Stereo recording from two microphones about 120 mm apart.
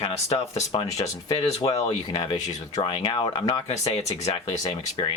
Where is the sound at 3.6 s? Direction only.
65° left (ahead or behind).